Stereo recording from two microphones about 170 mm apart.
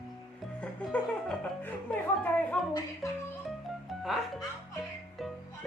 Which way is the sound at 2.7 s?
20° left (ahead or behind).